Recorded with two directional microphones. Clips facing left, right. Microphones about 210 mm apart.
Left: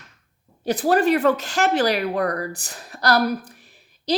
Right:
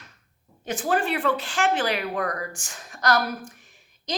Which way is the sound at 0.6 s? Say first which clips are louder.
Left 7 dB; 35° left (ahead or behind).